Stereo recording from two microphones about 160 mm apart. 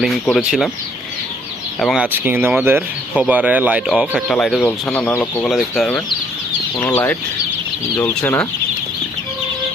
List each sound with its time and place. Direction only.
0.0 s speech: centre (ahead or behind)
1.8 s speech: centre (ahead or behind)
2.2 s speech: 10° right (ahead or behind)
6.7 s speech: 15° left (ahead or behind)